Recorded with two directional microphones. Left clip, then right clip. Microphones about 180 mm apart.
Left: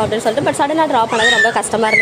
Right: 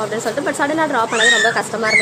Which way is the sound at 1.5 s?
20° left (ahead or behind).